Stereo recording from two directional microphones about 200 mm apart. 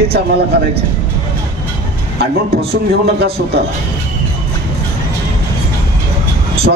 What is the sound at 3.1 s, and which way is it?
Speech, 55° right (ahead or behind).